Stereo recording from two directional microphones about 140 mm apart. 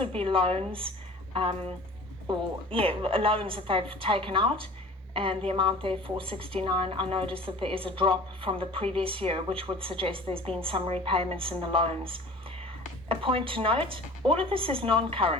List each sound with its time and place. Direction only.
0.0 s a woman's voice: 40° right (ahead or behind)